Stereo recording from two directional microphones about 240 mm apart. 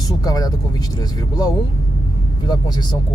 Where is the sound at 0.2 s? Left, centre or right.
Centre.